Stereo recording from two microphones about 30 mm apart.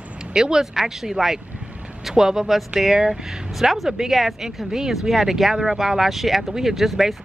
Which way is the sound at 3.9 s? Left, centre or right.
Centre.